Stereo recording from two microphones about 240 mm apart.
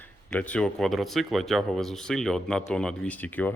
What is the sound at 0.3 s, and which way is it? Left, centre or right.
Speech, centre.